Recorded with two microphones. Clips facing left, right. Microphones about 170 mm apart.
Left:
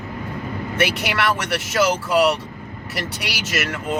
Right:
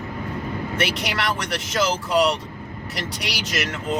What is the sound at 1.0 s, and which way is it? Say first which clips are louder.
Speech: left 4 dB; 60° left (ahead or behind).